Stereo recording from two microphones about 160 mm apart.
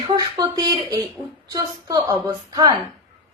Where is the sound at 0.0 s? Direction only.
30° right (ahead or behind).